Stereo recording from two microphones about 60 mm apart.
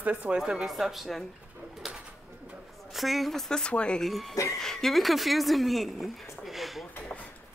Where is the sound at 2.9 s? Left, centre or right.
Centre.